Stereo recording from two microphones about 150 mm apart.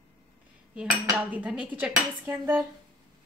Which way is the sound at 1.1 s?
10° right (ahead or behind).